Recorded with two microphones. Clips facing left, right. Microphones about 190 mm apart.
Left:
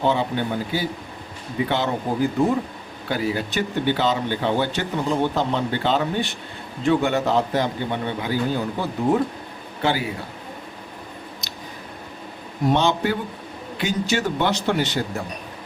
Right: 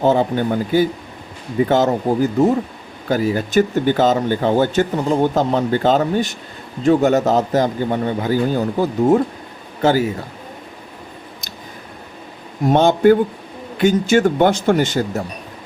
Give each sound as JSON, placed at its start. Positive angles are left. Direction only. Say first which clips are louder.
{"t": 0.0, "sound": "speech", "louder": "right 6 dB", "side_deg": -45}
{"t": 12.7, "sound": "speech", "louder": "right 10 dB", "side_deg": -50}